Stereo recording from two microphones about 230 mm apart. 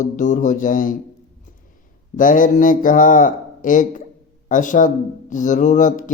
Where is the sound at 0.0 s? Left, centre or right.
Left.